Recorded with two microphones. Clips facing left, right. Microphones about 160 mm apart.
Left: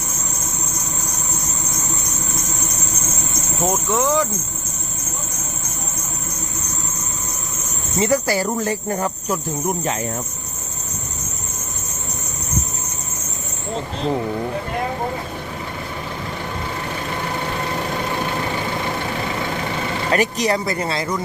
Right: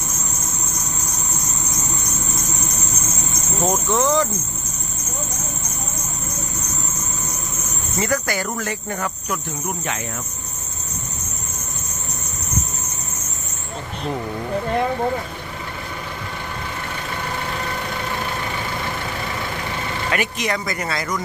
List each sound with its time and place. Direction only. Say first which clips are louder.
3.6 s speech: even; 10° left (ahead or behind)
7.9 s speech: left 4 dB; 25° left (ahead or behind)
13.7 s speech: left 4 dB; 30° left (ahead or behind)
20.1 s speech: left 5 dB; 35° left (ahead or behind)